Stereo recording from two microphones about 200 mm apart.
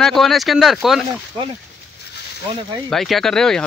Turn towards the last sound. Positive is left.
turn(degrees=5)  # may be behind; listen again after turning